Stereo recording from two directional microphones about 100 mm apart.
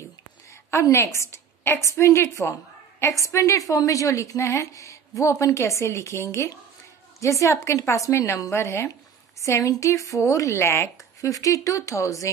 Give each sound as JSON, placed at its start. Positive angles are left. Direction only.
{"t": 0.7, "sound": "a woman's voice", "side_deg": 25}